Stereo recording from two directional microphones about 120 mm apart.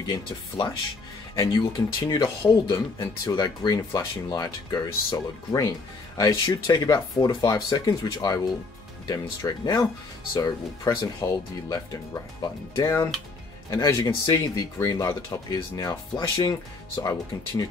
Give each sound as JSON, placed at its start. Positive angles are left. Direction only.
{"t": 0.0, "sound": "speech", "side_deg": 35}
{"t": 3.0, "sound": "speech", "side_deg": 30}